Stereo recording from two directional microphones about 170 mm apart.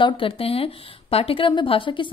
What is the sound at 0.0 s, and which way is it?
A woman's voice, 30° left (ahead or behind).